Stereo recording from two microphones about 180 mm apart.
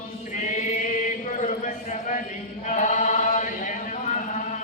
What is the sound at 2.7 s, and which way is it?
Chant, 45° left (ahead or behind).